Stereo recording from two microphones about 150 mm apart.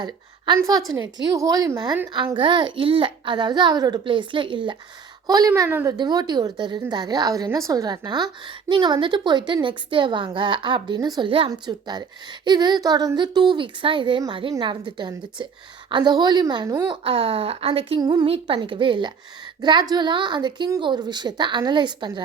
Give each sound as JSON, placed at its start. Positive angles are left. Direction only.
{"t": 0.0, "sound": "a woman's voice", "side_deg": -30}
{"t": 6.0, "sound": "a woman's voice", "side_deg": -30}
{"t": 18.0, "sound": "a woman's voice", "side_deg": -30}